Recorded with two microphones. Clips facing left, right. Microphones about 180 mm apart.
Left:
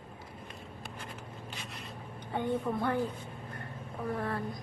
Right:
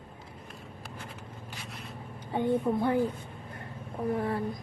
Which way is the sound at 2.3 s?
15° right (ahead or behind).